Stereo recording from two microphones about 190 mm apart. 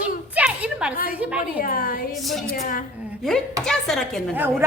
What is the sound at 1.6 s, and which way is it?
Speech, 50° left (ahead or behind).